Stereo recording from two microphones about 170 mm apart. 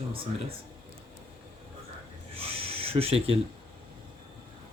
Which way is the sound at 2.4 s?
35° right (ahead or behind).